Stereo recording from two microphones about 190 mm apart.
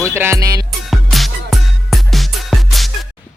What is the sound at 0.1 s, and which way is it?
Music, 15° right (ahead or behind).